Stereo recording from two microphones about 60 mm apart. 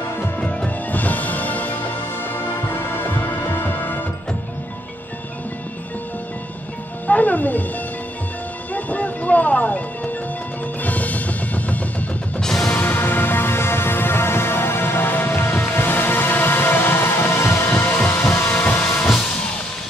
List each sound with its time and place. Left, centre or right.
0.9 s music: left
7.1 s music: left
8.7 s a sound: left
10.8 s music: left
12.4 s music: centre
12.8 s music: left
17.2 s music: centre
17.6 s music: centre